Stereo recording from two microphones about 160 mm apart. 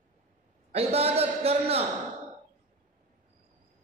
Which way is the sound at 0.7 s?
40° right (ahead or behind).